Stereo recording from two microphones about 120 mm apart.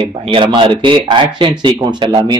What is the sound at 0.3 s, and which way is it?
Speech, 45° right (ahead or behind).